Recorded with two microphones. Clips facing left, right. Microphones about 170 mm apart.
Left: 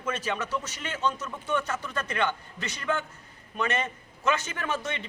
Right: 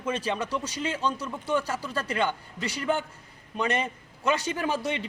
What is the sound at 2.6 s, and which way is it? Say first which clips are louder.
Speech: right 3 dB; 30° right (ahead or behind).